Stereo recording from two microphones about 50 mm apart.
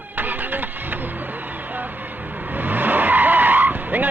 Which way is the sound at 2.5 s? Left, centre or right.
Right.